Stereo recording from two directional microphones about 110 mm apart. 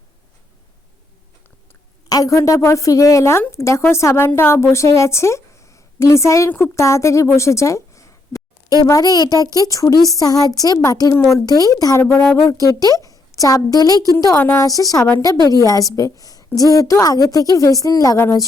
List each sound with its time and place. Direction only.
2.0 s a woman's voice: 35° left (ahead or behind)